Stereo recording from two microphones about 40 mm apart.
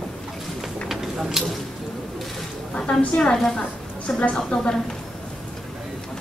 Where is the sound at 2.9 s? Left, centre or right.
Left.